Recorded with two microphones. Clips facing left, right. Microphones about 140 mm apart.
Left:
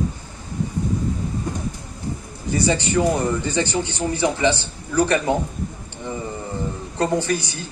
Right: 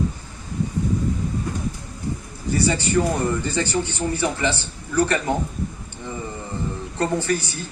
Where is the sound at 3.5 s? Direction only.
20° left (ahead or behind).